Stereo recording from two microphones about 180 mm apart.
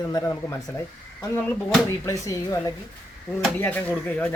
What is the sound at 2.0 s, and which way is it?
Speech, 15° left (ahead or behind).